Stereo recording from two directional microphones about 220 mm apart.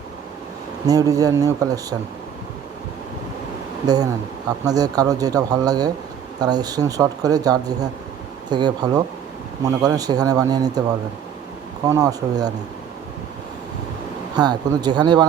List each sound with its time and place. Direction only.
0.9 s speech: 15° right (ahead or behind)
3.8 s speech: 15° right (ahead or behind)
11.9 s speech: 15° right (ahead or behind)
14.3 s speech: 20° right (ahead or behind)